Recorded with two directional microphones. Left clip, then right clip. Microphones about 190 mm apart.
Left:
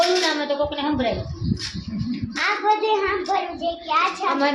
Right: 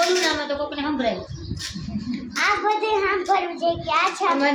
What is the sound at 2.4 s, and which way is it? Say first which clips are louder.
A child's voice: even; 15° right (ahead or behind).